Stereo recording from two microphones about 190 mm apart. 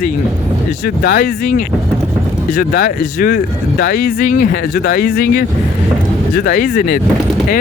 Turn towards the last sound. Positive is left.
turn(degrees=55)  # may be behind; listen again after turning